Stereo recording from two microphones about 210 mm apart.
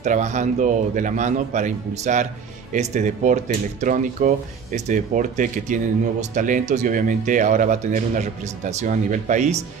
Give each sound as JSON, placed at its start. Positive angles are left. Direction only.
{"t": 0.0, "sound": "speech", "side_deg": -35}